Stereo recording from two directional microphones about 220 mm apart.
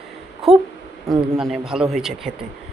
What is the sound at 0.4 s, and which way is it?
Speech, centre (ahead or behind).